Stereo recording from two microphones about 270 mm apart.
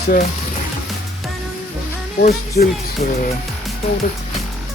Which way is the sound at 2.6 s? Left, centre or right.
Left.